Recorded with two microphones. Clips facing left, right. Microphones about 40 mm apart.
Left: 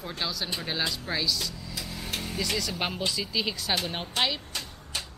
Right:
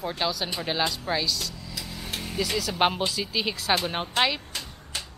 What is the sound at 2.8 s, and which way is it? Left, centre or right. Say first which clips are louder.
Speech: right 7 dB; right.